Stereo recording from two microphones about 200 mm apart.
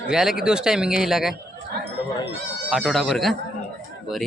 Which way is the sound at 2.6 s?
Centre (ahead or behind).